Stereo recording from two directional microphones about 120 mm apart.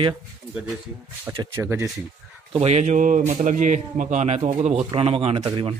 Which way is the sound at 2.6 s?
80° right.